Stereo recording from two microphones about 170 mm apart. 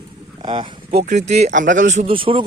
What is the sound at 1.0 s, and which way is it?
Speech, 45° right (ahead or behind).